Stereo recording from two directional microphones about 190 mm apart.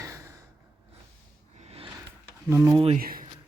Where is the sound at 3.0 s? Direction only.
50° right (ahead or behind).